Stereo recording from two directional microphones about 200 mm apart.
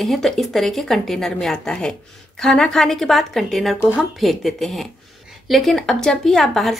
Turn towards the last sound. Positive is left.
turn(degrees=0)  # may be behind; listen again after turning